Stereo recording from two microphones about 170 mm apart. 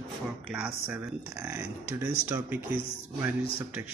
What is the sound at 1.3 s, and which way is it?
Speech, 20° right (ahead or behind).